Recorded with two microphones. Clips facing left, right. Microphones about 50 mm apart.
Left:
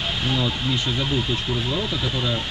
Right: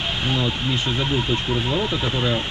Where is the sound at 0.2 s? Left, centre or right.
Centre.